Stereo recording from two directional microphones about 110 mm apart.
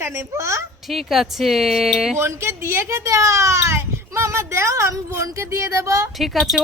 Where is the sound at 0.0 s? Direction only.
20° right (ahead or behind).